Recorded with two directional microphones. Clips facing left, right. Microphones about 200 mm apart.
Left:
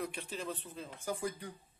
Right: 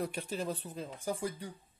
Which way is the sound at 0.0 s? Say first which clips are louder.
Right 4 dB; 40° right (ahead or behind).